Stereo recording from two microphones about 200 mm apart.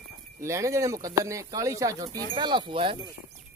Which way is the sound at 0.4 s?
15° right (ahead or behind).